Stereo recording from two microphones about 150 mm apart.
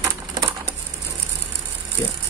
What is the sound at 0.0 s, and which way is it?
Typewriter, 25° right (ahead or behind).